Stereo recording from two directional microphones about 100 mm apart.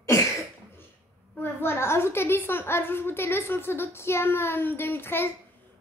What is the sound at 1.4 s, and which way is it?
A child's voice, 25° left (ahead or behind).